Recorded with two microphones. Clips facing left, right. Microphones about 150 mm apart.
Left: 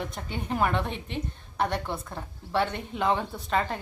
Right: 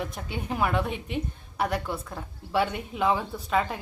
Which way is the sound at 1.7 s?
30° left (ahead or behind).